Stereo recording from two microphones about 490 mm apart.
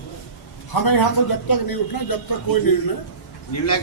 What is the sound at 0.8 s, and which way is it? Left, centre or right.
Speech, left.